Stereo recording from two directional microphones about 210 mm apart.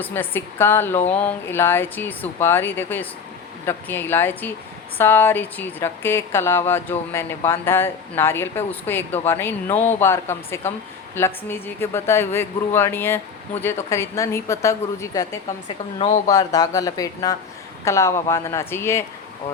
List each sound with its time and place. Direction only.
0.0 s a woman's voice: 10° left (ahead or behind)
16.0 s speech: 35° left (ahead or behind)
16.3 s a woman's voice: 15° left (ahead or behind)